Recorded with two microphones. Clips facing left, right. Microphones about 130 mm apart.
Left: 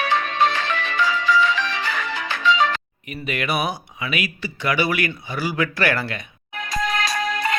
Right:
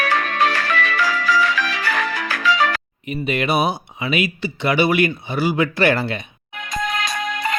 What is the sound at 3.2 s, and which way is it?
Speech, 25° right (ahead or behind).